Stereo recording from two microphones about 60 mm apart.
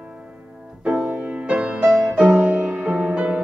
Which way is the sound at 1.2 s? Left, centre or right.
Centre.